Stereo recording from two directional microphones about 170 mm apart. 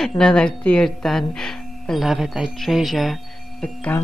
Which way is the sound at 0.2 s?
5° left (ahead or behind).